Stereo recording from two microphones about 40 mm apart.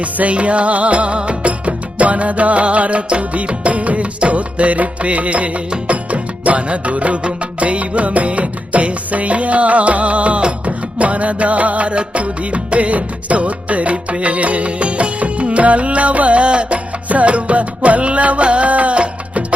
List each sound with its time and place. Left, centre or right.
0.0 s music: right